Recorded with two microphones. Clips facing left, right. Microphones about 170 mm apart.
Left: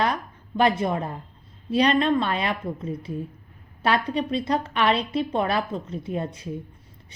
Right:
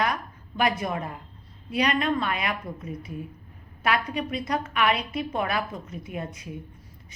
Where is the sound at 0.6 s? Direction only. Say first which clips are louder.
Left 4 dB; 30° left (ahead or behind).